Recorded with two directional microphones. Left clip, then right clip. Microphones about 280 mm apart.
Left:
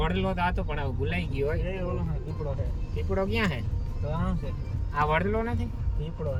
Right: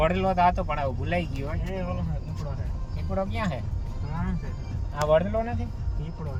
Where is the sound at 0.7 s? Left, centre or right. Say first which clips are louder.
Right 4 dB; left.